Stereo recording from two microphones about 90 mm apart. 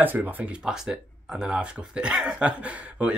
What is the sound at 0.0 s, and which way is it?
Speech, 20° right (ahead or behind).